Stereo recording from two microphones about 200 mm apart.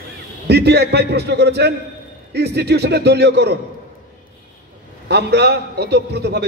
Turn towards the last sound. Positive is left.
turn(degrees=-55)  # may be behind; listen again after turning